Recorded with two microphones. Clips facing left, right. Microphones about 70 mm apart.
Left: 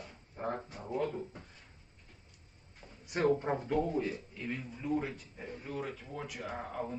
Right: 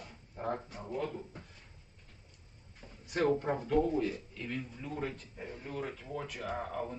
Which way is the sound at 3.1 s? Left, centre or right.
Left.